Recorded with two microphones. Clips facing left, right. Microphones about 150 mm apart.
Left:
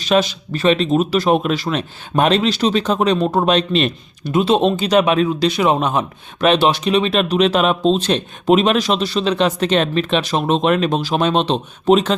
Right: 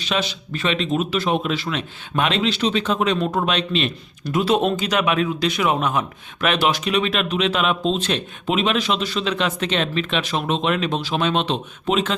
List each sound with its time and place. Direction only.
0.0 s speech: 45° left (ahead or behind)
4.3 s speech: 25° left (ahead or behind)